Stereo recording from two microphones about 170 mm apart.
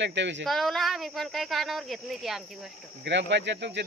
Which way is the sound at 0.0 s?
90° right.